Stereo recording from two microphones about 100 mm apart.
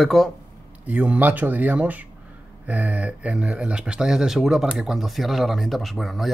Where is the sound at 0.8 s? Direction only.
15° right (ahead or behind).